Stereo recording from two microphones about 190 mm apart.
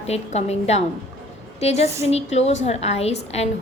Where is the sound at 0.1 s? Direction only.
35° left (ahead or behind).